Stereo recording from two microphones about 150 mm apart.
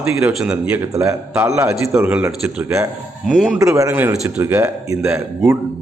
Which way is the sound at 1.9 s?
15° right (ahead or behind).